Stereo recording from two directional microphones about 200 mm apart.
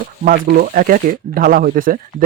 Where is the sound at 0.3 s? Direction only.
45° right (ahead or behind).